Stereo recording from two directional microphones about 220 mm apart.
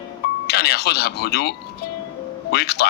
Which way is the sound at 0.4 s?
45° left (ahead or behind).